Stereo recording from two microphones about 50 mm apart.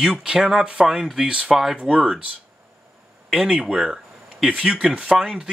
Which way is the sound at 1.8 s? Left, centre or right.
Centre.